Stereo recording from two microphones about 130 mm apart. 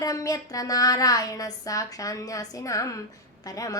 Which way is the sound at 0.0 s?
25° left (ahead or behind).